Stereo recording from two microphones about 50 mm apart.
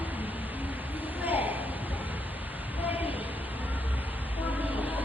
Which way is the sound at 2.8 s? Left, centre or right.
Right.